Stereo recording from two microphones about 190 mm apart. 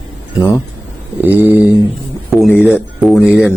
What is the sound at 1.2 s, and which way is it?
Speech, 10° right (ahead or behind).